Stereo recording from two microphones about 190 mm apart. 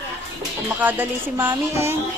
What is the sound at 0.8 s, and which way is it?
A woman's voice, 10° right (ahead or behind).